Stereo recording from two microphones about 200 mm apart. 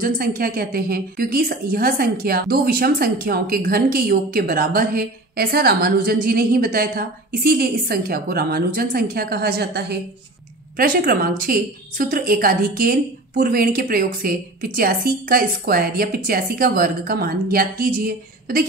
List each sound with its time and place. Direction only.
0.0 s a woman's voice: 45° right (ahead or behind)